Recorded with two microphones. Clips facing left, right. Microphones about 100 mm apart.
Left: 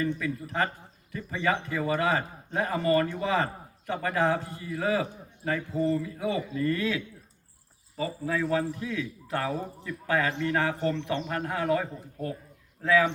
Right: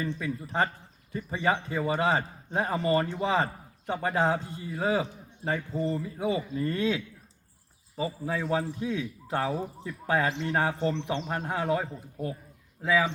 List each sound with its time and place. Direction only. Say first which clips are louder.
0.0 s a man's voice: left 3 dB; 25° right (ahead or behind)